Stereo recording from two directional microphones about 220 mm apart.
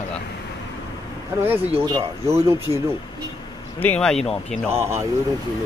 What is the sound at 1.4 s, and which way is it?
Speech, 10° right (ahead or behind).